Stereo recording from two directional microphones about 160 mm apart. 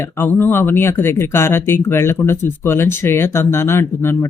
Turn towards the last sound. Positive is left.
turn(degrees=15)  # may be behind; listen again after turning